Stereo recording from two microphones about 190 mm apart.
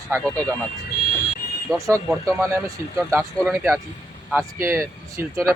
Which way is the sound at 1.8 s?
15° right (ahead or behind).